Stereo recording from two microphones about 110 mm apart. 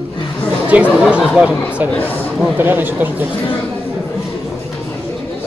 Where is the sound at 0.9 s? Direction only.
10° right (ahead or behind).